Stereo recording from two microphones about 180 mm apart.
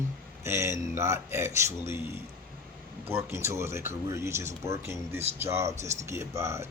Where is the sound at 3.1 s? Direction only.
15° right (ahead or behind).